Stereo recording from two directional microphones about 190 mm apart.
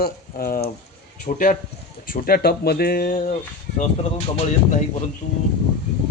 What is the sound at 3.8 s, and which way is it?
Speech, 35° left (ahead or behind).